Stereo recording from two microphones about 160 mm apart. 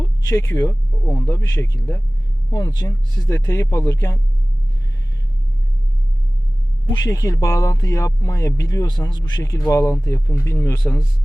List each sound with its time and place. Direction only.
0.0 s speech: 20° left (ahead or behind)
6.8 s speech: 25° left (ahead or behind)